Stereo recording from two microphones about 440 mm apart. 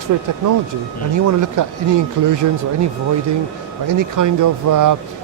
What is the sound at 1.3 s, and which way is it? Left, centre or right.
Speech, right.